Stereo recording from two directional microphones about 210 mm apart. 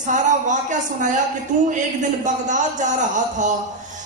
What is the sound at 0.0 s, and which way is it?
A woman's voice, 35° right (ahead or behind).